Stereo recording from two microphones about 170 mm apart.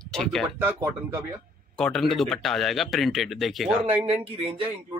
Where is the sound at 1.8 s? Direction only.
5° left (ahead or behind).